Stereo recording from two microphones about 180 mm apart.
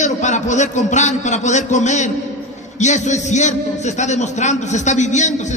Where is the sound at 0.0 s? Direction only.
40° left (ahead or behind).